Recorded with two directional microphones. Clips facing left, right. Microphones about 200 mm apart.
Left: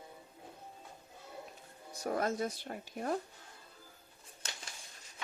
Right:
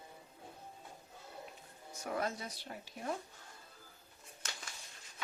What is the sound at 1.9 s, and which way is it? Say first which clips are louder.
Speech: left 4 dB; 40° left (ahead or behind).